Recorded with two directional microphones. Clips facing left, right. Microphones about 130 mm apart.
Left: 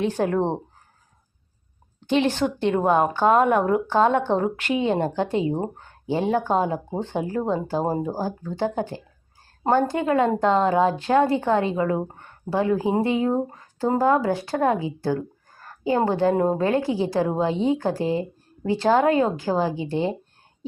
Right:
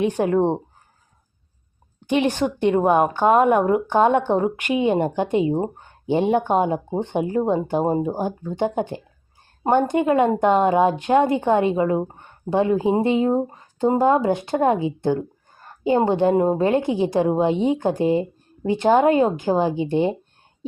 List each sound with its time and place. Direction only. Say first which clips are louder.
0.0 s speech: right 3 dB; 10° right (ahead or behind)
2.0 s a woman's voice: right 1 dB; 15° right (ahead or behind)